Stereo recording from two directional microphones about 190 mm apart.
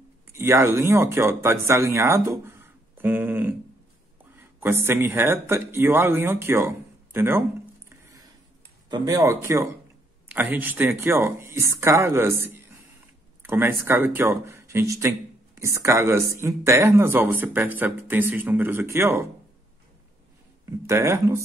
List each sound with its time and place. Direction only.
0.3 s speech: 15° right (ahead or behind)
8.8 s speech: 20° right (ahead or behind)
13.4 s speech: 10° right (ahead or behind)
20.8 s speech: 15° right (ahead or behind)